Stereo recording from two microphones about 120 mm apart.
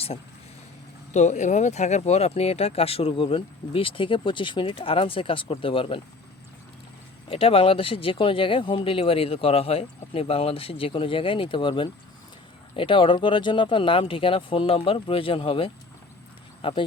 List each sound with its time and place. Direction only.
1.1 s speech: 75° left (ahead or behind); by 6.0 s 50° left (ahead or behind)
7.3 s speech: 50° left (ahead or behind)